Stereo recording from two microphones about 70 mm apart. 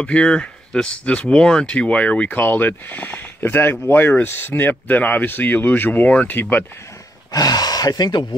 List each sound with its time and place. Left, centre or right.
0.0 s speech: centre
7.3 s speech: left